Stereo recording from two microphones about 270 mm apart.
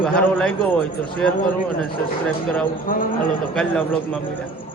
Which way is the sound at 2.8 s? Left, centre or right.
Left.